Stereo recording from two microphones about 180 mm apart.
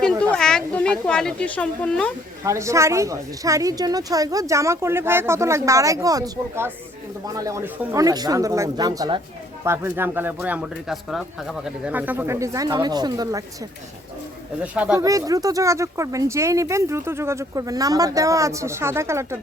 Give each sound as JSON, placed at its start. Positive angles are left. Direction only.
{"t": 0.0, "sound": "a sound", "side_deg": 5}
{"t": 2.4, "sound": "speech", "side_deg": -15}
{"t": 14.6, "sound": "speech", "side_deg": -5}
{"t": 15.0, "sound": "speech", "side_deg": -20}